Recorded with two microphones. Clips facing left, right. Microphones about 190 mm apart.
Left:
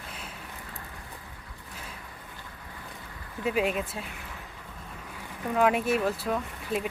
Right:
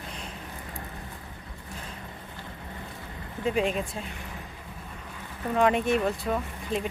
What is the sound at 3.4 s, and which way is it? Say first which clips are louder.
Speech: right 1 dB; 5° left (ahead or behind).